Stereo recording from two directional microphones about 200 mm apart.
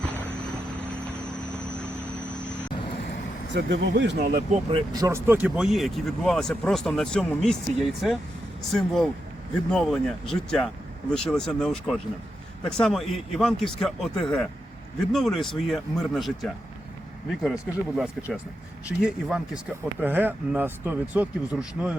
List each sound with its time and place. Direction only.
3.5 s speech: 65° right (ahead or behind)
4.7 s speech: 20° right (ahead or behind)